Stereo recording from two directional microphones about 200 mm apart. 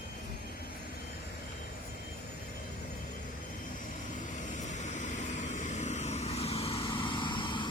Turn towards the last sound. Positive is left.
turn(degrees=25)  # may be behind; listen again after turning